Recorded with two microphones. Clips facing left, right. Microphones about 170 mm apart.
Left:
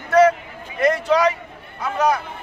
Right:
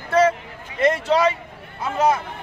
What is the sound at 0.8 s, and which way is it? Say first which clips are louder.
Speech: left 1 dB; 25° right (ahead or behind).